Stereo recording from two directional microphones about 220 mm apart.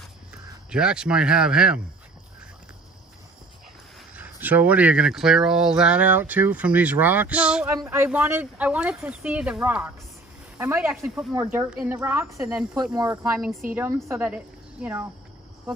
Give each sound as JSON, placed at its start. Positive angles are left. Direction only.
{"t": 0.7, "sound": "speech", "side_deg": -5}
{"t": 4.1, "sound": "speech", "side_deg": -10}
{"t": 12.9, "sound": "speech", "side_deg": -15}